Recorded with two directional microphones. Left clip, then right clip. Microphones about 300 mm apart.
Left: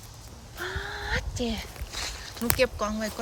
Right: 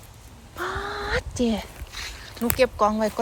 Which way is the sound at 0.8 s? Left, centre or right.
Centre.